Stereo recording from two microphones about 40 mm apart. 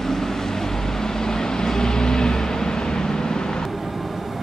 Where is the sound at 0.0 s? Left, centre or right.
Centre.